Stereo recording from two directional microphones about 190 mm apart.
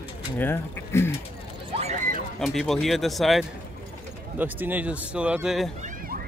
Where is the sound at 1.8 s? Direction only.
35° right (ahead or behind).